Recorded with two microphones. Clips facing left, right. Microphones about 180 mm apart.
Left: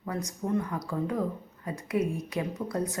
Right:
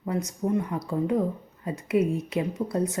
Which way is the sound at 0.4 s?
20° right (ahead or behind).